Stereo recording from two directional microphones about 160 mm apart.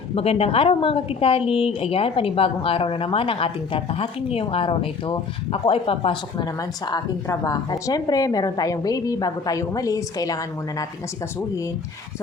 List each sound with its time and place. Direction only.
0.2 s a woman's voice: 35° left (ahead or behind); by 10.8 s 20° left (ahead or behind)